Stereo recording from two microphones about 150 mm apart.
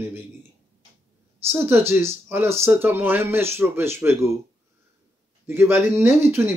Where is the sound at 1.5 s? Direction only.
15° right (ahead or behind).